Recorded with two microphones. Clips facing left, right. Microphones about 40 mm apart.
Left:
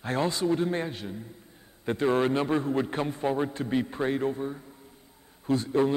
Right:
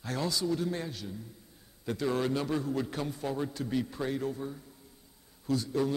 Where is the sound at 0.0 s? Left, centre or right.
Left.